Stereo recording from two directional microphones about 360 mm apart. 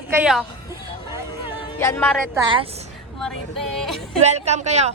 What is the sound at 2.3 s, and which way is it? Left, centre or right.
Speech, centre.